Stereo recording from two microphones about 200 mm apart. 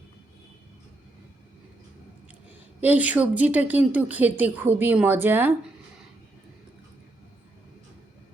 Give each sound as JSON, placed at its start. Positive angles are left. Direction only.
{"t": 2.8, "sound": "a woman's voice", "side_deg": -10}